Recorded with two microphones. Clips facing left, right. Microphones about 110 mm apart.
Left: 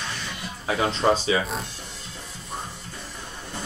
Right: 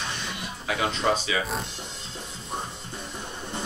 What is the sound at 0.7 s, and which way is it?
Speech, 30° left (ahead or behind).